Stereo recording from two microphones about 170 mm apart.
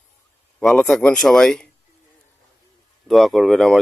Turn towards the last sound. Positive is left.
turn(degrees=0)  # may be behind; listen again after turning